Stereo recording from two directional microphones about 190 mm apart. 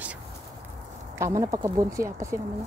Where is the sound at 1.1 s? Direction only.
15° right (ahead or behind).